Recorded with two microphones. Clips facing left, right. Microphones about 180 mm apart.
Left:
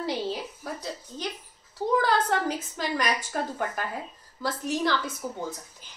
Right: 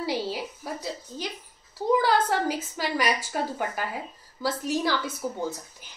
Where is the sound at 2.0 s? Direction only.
5° right (ahead or behind).